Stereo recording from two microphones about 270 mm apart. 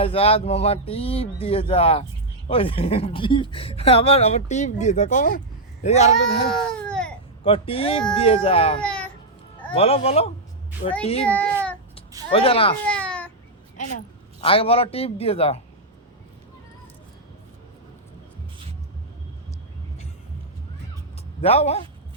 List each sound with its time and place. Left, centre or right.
0.0 s speech: left
6.5 s baby cry: centre
7.4 s speech: left
8.8 s a sound: centre
9.7 s speech: left
12.3 s speech: left
12.8 s baby cry: centre
13.7 s a woman's voice: left
21.4 s speech: left